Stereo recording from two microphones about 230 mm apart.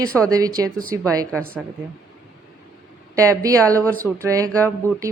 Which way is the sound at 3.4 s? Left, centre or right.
Centre.